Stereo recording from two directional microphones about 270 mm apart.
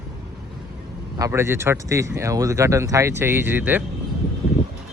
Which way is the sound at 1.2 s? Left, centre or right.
Centre.